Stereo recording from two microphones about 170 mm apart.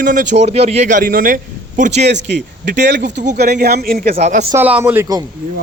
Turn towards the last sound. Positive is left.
turn(degrees=-15)  # may be behind; listen again after turning